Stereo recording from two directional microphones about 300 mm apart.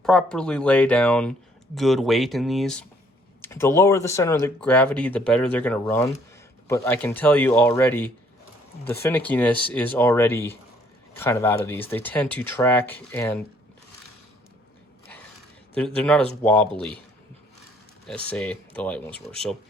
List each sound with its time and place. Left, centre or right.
0.0 s speech: centre
15.7 s speech: centre
18.3 s speech: centre